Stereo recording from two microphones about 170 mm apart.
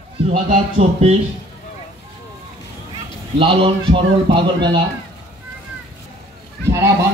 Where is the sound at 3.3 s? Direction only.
30° right (ahead or behind).